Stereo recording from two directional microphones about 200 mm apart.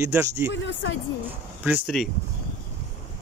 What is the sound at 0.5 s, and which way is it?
Speech, 65° left (ahead or behind).